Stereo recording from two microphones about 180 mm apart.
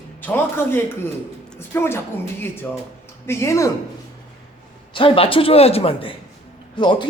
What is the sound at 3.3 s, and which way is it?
Speech, 15° left (ahead or behind).